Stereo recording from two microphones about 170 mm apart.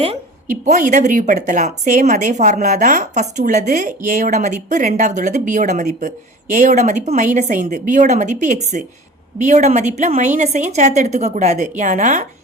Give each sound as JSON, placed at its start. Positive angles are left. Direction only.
{"t": 0.5, "sound": "a woman's voice", "side_deg": -45}